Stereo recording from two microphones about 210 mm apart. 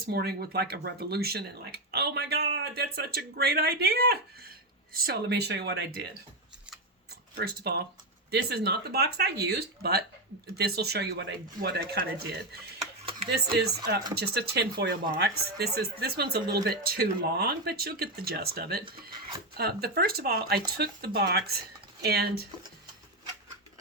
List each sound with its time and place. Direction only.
0.0 s speech: 50° right (ahead or behind)
7.3 s speech: 50° right (ahead or behind)